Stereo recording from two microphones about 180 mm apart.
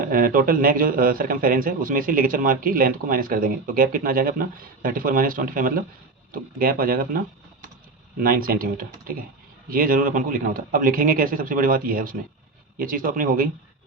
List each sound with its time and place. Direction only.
0.0 s a man's voice: 50° right (ahead or behind)
8.2 s a man's voice: 55° right (ahead or behind)